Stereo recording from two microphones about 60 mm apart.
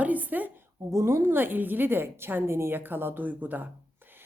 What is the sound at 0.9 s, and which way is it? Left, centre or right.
Speech, right.